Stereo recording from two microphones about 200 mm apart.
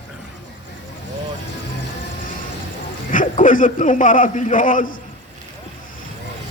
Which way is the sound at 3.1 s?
40° left (ahead or behind).